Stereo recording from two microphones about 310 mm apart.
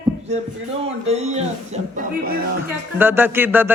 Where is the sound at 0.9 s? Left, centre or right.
Right.